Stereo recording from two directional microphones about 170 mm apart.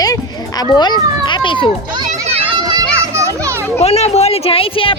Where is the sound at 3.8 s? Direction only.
35° left (ahead or behind).